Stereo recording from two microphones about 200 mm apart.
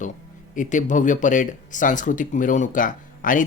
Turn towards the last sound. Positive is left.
turn(degrees=40)  # may be behind; listen again after turning